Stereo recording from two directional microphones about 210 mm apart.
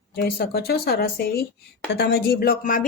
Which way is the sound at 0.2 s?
45° left (ahead or behind).